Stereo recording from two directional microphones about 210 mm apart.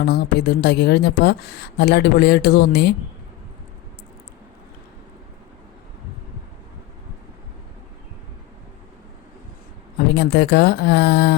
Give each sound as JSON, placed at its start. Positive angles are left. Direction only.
{"t": 0.0, "sound": "a woman's voice", "side_deg": 50}
{"t": 10.2, "sound": "a woman's voice", "side_deg": 50}